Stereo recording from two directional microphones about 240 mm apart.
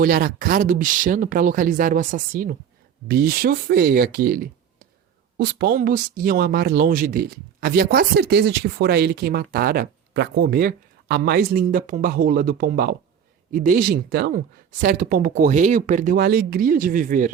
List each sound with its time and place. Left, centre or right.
0.0 s speech: right